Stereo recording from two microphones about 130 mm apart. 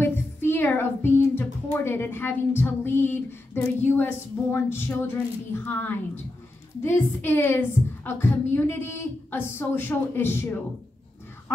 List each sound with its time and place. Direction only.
0.0 s speech: 15° left (ahead or behind)